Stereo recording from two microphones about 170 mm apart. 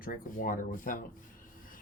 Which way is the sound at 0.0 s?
55° left (ahead or behind).